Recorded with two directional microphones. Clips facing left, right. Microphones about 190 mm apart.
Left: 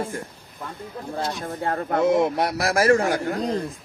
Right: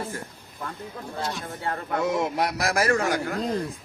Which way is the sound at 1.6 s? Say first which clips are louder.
Left 6 dB; 45° left (ahead or behind).